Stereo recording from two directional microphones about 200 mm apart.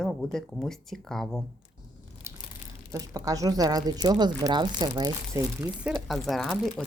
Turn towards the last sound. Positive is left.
turn(degrees=0)  # may be behind; listen again after turning